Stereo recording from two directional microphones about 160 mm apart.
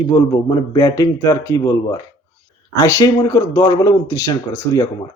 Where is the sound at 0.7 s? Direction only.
20° left (ahead or behind).